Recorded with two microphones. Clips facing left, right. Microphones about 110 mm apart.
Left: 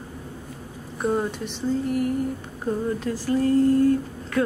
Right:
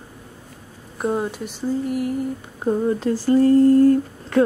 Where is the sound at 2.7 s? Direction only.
30° right (ahead or behind).